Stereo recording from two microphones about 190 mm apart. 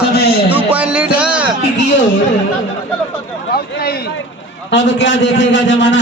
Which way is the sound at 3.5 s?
55° left (ahead or behind).